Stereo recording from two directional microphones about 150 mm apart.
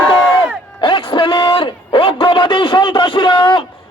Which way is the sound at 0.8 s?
35° left (ahead or behind).